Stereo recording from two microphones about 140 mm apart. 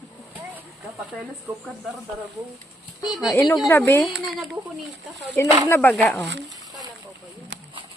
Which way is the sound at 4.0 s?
Centre (ahead or behind).